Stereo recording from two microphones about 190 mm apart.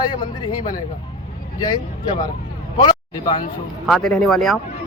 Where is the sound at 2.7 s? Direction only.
25° left (ahead or behind).